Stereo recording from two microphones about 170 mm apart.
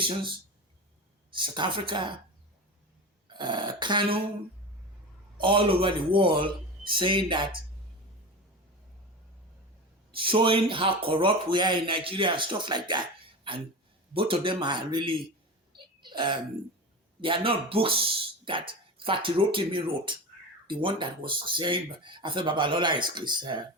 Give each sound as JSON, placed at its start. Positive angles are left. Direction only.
{"t": 0.0, "sound": "speech", "side_deg": -30}
{"t": 3.2, "sound": "speech", "side_deg": -25}
{"t": 5.4, "sound": "speech", "side_deg": -30}
{"t": 10.1, "sound": "speech", "side_deg": -30}
{"t": 15.7, "sound": "a sound", "side_deg": -25}
{"t": 17.2, "sound": "speech", "side_deg": -30}